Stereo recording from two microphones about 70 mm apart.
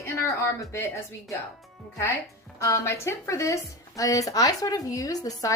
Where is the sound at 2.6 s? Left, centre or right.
Left.